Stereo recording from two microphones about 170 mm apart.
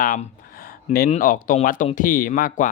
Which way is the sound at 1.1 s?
55° left (ahead or behind).